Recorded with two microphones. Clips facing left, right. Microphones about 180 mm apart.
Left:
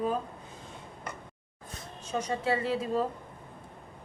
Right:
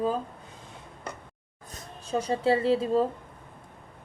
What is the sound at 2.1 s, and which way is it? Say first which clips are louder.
Speech: right 5 dB; 30° right (ahead or behind).